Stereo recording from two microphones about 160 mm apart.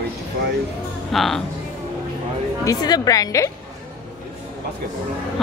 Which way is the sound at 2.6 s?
25° left (ahead or behind).